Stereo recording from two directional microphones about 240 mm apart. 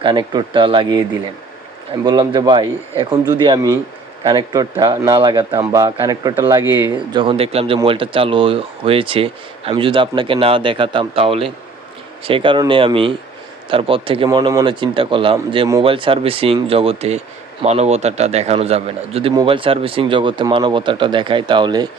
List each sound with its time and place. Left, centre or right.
0.0 s speech: centre
2.0 s a man's voice: centre
7.2 s speech: right